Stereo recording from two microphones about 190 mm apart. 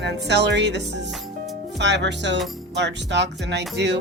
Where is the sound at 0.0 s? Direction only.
65° right (ahead or behind).